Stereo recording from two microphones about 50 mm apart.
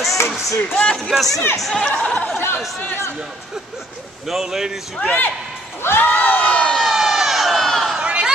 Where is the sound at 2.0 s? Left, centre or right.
Left.